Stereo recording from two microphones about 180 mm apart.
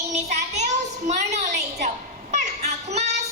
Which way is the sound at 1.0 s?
40° right (ahead or behind).